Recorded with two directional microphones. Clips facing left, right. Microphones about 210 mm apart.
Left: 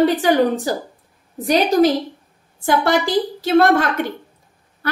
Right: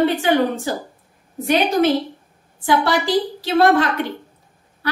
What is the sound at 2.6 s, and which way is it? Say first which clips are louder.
A woman's voice: left 1 dB; 50° left (ahead or behind).